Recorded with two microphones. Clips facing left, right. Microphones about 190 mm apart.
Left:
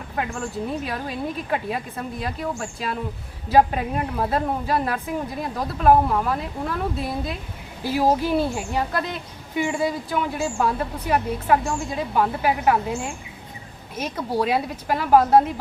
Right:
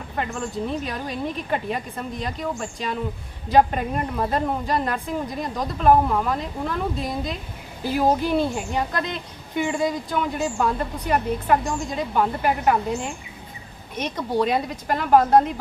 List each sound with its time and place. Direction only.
0.2 s a woman's voice: 5° left (ahead or behind)